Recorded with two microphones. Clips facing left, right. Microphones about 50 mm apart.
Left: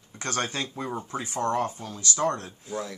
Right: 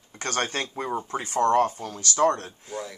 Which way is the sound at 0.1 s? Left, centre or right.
Right.